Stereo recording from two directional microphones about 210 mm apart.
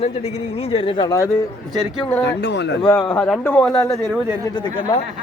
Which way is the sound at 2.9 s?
10° left (ahead or behind).